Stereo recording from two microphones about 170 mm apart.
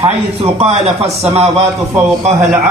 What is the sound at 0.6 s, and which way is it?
Speech, 35° right (ahead or behind).